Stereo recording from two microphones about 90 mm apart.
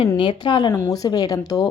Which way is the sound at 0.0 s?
65° left (ahead or behind).